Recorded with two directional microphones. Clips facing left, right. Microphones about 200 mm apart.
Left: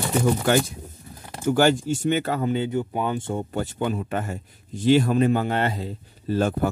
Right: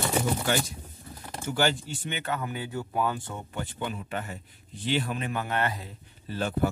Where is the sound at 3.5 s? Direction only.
40° left (ahead or behind).